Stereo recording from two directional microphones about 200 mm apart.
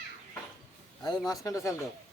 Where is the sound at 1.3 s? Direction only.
15° left (ahead or behind).